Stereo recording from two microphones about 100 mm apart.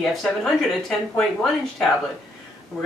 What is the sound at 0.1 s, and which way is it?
Speech, 5° left (ahead or behind).